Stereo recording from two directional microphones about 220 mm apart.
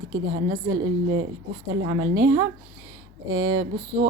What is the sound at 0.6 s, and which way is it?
Speech, 65° right (ahead or behind).